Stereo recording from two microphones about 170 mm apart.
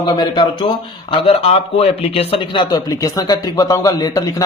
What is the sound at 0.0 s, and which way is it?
A man's voice, 25° left (ahead or behind).